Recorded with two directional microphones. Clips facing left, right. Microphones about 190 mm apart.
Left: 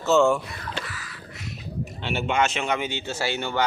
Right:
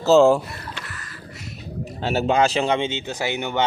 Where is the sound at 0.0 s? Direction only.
35° right (ahead or behind).